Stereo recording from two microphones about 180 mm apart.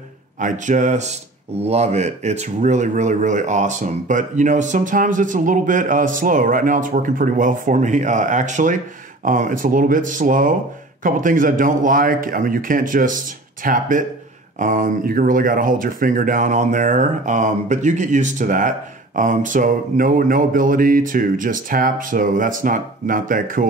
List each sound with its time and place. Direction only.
0.4 s speech: 45° right (ahead or behind)